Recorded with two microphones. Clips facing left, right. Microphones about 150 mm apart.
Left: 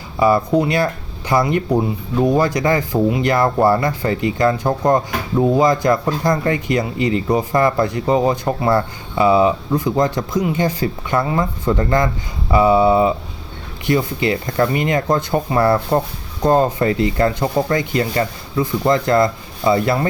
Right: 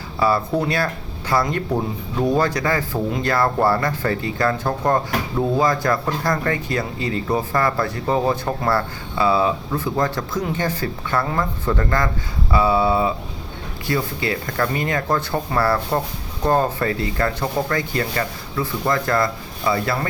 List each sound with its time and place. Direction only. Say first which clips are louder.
0.2 s speech: left 5 dB; 15° left (ahead or behind)